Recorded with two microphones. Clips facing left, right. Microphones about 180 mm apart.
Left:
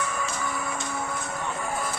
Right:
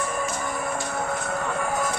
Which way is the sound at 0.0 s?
45° right (ahead or behind).